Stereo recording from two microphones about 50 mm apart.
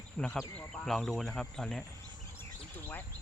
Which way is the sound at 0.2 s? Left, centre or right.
Centre.